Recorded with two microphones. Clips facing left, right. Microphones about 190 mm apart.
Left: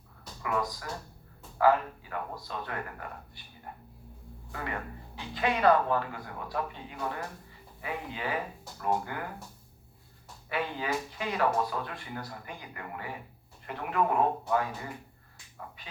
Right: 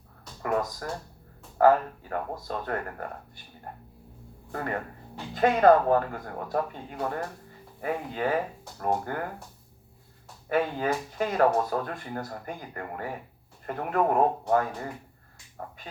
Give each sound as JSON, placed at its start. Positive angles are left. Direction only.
{"t": 0.4, "sound": "speech", "side_deg": -45}
{"t": 10.5, "sound": "speech", "side_deg": -45}